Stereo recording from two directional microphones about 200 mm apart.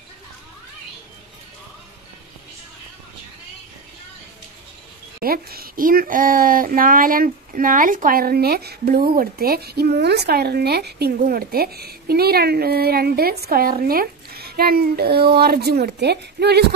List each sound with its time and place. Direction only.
5.2 s speech: 50° right (ahead or behind)